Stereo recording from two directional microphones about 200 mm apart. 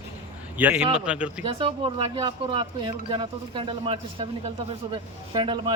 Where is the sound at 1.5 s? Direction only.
25° right (ahead or behind).